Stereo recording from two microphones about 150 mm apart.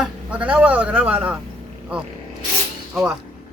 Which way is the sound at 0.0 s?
10° right (ahead or behind).